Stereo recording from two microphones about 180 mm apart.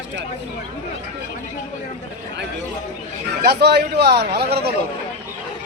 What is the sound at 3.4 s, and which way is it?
Speech, 65° right (ahead or behind).